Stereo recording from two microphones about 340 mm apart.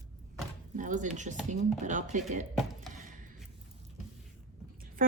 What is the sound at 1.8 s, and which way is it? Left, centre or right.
Speech, right.